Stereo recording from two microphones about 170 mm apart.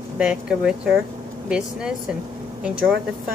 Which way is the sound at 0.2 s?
5° right (ahead or behind).